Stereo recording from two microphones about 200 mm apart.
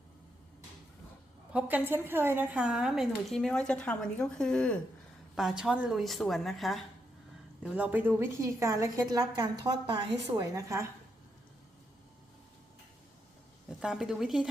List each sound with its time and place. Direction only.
1.5 s a woman's voice: 10° right (ahead or behind)
13.7 s a woman's voice: 5° right (ahead or behind)